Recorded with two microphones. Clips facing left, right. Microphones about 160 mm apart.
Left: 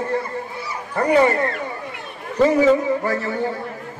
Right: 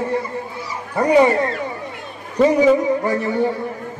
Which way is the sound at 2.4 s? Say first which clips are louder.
Right 1 dB; 15° right (ahead or behind).